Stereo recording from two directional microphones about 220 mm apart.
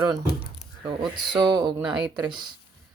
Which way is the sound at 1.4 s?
20° right (ahead or behind).